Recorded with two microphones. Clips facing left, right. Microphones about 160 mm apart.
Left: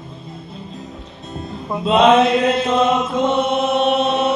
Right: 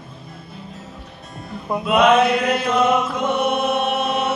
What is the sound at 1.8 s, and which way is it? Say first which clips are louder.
Chant: left 2 dB; 25° left (ahead or behind).